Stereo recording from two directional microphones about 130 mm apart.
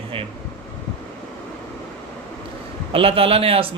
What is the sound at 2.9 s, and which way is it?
Speech, 45° right (ahead or behind).